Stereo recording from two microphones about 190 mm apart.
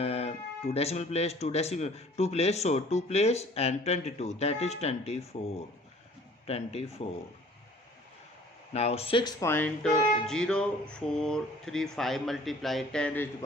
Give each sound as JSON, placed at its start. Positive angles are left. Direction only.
{"t": 0.0, "sound": "speech", "side_deg": 30}
{"t": 8.7, "sound": "speech", "side_deg": 35}
{"t": 9.4, "sound": "speech", "side_deg": 10}